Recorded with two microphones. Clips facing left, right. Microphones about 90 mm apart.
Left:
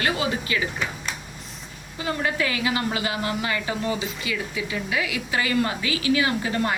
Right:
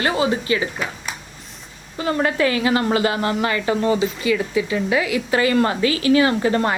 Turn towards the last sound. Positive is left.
turn(degrees=-50)  # may be behind; listen again after turning